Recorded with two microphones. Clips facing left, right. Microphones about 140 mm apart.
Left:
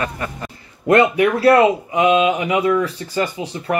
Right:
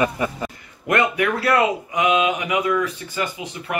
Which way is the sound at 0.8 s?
25° left (ahead or behind).